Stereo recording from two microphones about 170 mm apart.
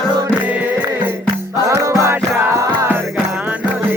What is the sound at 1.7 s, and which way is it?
Music, 20° right (ahead or behind).